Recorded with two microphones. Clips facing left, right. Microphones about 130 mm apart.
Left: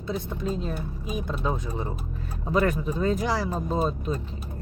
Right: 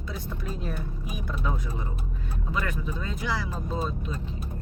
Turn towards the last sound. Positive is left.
turn(degrees=40)  # may be behind; listen again after turning